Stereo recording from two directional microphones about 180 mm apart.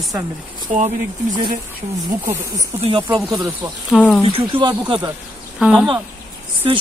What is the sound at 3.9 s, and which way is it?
Speech, 5° left (ahead or behind).